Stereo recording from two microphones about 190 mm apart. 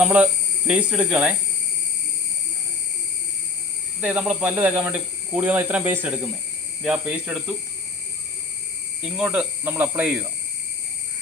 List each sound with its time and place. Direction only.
0.0 s speech: 5° right (ahead or behind)
4.0 s speech: 5° right (ahead or behind)
9.0 s speech: 5° right (ahead or behind)